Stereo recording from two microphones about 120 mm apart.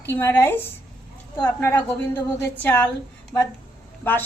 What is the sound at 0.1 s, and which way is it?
A woman's voice, 20° left (ahead or behind).